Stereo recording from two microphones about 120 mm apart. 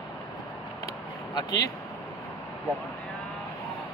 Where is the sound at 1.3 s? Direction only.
30° left (ahead or behind).